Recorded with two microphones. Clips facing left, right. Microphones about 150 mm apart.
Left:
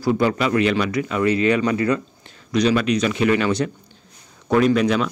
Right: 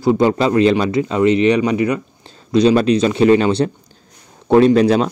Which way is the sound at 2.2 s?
30° right (ahead or behind).